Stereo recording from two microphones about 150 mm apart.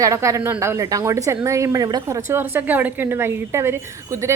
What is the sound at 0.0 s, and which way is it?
A woman's voice, 20° right (ahead or behind).